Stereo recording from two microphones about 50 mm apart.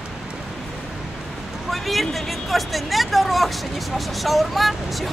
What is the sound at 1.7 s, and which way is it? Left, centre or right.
Speech, centre.